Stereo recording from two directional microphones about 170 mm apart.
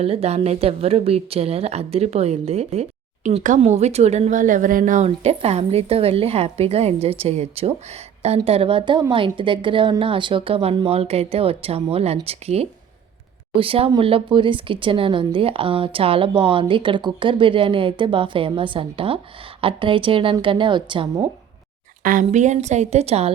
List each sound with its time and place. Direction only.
0.0 s a woman's voice: 35° right (ahead or behind)
22.0 s a woman's voice: 50° right (ahead or behind)